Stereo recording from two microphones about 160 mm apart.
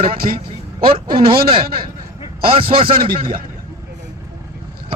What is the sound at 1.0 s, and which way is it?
Speech, 70° right (ahead or behind).